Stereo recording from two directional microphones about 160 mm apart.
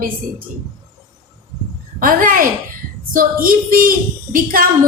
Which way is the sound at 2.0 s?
60° right (ahead or behind).